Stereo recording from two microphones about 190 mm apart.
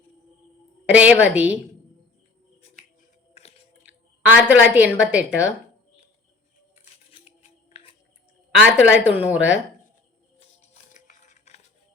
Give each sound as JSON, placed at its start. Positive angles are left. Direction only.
{"t": 0.9, "sound": "a woman's voice", "side_deg": -5}
{"t": 3.3, "sound": "chewing", "side_deg": 35}
{"t": 4.4, "sound": "a woman's voice", "side_deg": -5}
{"t": 6.7, "sound": "a sound", "side_deg": 35}
{"t": 8.6, "sound": "a woman's voice", "side_deg": -5}
{"t": 10.6, "sound": "music", "side_deg": 40}